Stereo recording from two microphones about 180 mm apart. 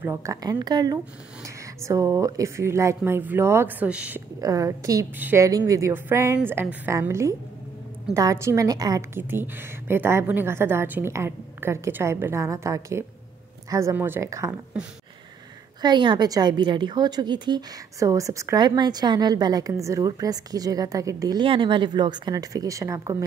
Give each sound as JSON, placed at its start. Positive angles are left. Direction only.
{"t": 0.0, "sound": "a woman's voice", "side_deg": -15}
{"t": 4.4, "sound": "a woman's voice", "side_deg": -20}
{"t": 15.8, "sound": "a woman's voice", "side_deg": -25}